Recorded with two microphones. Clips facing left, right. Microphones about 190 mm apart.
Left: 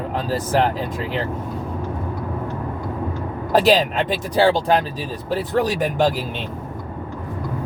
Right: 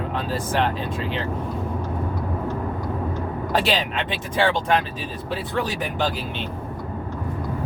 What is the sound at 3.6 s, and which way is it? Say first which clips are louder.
Speech: left 7 dB; 40° left (ahead or behind).